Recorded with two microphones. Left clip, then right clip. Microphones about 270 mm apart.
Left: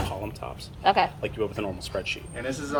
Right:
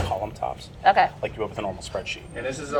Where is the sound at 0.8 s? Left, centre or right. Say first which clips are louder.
Right 4 dB; left.